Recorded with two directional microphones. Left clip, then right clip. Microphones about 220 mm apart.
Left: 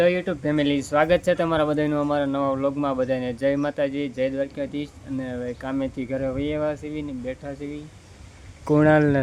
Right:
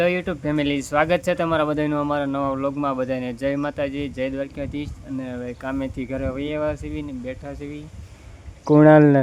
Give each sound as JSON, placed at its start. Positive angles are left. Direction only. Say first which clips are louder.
{"t": 0.0, "sound": "speech", "louder": "left 1 dB", "side_deg": -5}
{"t": 8.6, "sound": "speech", "louder": "right 5 dB", "side_deg": -15}